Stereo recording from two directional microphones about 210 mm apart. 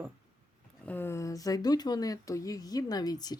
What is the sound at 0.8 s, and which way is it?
Speech, 10° left (ahead or behind).